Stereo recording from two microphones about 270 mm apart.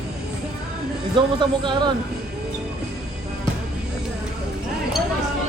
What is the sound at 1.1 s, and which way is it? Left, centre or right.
Speech, centre.